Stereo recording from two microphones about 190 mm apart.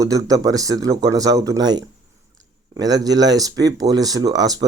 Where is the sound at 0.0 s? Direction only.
20° right (ahead or behind).